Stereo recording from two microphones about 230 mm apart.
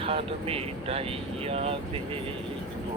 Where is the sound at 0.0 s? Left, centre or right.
Right.